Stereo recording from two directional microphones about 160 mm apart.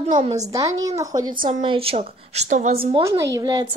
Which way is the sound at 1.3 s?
60° right (ahead or behind).